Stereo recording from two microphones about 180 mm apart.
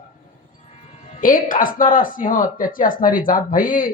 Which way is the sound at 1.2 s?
50° left (ahead or behind).